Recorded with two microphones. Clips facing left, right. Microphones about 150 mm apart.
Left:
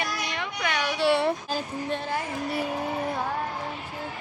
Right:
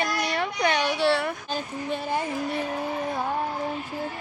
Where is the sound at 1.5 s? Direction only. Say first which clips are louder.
Even; centre (ahead or behind).